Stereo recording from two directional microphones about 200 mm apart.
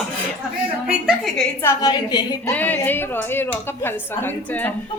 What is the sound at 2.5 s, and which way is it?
A woman's voice, 10° left (ahead or behind).